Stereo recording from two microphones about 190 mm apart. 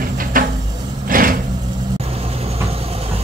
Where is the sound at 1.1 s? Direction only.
50° right (ahead or behind).